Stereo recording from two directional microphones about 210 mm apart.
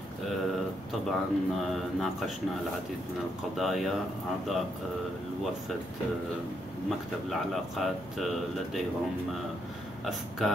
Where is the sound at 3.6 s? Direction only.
Centre (ahead or behind).